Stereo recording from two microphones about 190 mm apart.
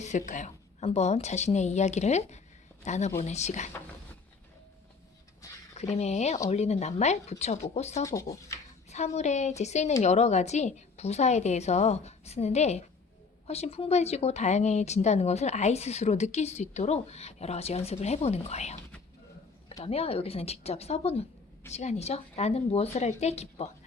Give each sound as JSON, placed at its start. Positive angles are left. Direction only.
{"t": 0.0, "sound": "speech", "side_deg": 40}
{"t": 5.7, "sound": "speech", "side_deg": 35}
{"t": 8.0, "sound": "speech", "side_deg": 15}
{"t": 8.9, "sound": "speech", "side_deg": 35}
{"t": 19.8, "sound": "speech", "side_deg": 30}